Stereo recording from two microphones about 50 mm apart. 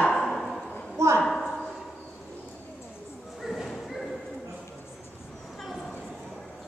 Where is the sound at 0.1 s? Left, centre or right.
Centre.